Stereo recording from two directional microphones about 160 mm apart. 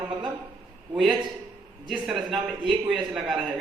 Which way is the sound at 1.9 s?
Centre (ahead or behind).